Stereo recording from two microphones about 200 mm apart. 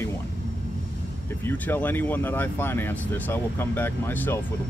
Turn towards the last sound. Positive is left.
turn(degrees=10)  # may be behind; listen again after turning